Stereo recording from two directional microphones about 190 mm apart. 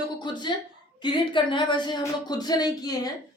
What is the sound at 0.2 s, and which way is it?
A woman's voice, 25° left (ahead or behind).